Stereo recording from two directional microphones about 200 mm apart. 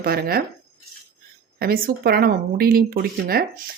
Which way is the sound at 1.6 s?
50° right (ahead or behind).